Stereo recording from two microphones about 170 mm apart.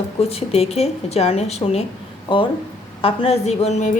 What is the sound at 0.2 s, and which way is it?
A woman's voice, 35° left (ahead or behind).